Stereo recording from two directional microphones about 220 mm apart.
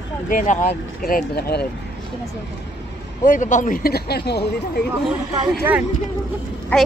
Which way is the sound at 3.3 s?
35° left (ahead or behind).